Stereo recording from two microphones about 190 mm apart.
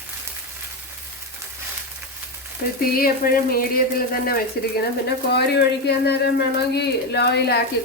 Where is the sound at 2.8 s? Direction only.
50° left (ahead or behind).